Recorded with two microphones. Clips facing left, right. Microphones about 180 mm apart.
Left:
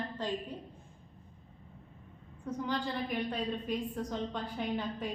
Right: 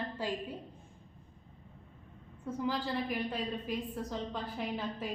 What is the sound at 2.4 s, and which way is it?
A woman's voice, 5° right (ahead or behind).